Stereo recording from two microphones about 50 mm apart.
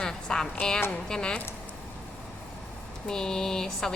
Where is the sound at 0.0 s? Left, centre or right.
Centre.